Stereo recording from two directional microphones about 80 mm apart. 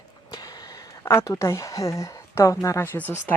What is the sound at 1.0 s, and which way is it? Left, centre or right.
Speech, left.